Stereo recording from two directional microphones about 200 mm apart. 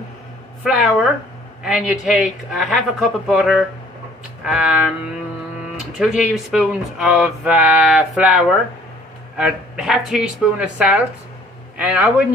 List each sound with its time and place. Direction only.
0.7 s speech: centre (ahead or behind)
5.9 s speech: 5° right (ahead or behind)